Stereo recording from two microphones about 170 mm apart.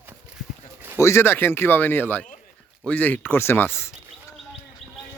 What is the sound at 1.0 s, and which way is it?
Speech, 15° left (ahead or behind).